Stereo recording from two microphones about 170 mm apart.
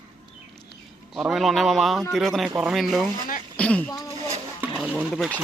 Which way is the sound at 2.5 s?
10° right (ahead or behind).